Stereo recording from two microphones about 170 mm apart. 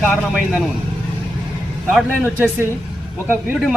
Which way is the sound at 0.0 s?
Centre (ahead or behind).